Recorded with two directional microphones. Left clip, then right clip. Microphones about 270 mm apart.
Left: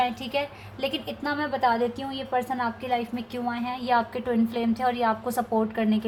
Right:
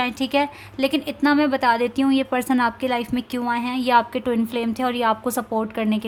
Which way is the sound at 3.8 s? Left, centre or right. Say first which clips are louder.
Right 6 dB; right.